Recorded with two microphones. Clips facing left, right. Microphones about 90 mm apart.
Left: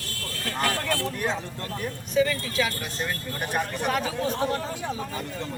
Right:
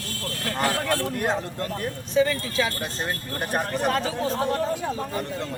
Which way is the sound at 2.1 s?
30° right (ahead or behind).